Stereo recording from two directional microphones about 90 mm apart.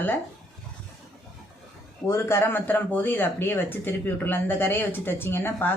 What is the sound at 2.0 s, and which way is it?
Speech, 30° left (ahead or behind).